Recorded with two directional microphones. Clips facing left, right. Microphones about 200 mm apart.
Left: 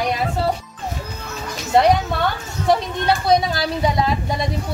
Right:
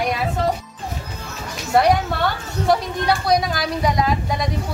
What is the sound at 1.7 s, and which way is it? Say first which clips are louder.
Speech: left 1 dB; 20° left (ahead or behind).